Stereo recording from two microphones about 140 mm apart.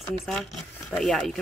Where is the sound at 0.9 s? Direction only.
5° left (ahead or behind).